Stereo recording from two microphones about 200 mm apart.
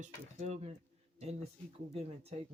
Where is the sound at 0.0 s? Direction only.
35° right (ahead or behind).